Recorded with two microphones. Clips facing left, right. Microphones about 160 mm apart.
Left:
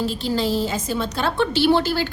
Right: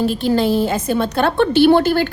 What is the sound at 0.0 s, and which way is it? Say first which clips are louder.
A woman's voice: right 6 dB; 55° right (ahead or behind).